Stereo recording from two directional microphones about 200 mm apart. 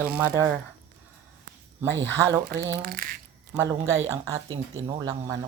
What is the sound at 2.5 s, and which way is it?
Speech, 55° right (ahead or behind).